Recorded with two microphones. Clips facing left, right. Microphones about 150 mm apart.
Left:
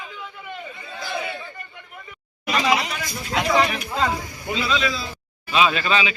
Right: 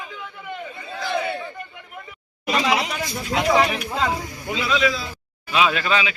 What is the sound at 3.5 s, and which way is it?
A man's voice, 10° right (ahead or behind).